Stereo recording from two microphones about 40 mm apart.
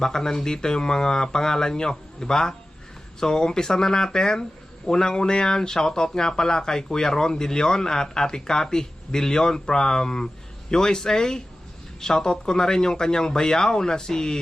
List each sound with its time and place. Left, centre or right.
0.0 s speech: centre